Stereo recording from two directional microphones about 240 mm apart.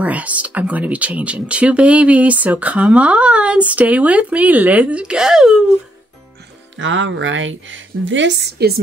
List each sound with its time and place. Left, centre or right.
0.0 s speech: centre
6.8 s a woman's voice: right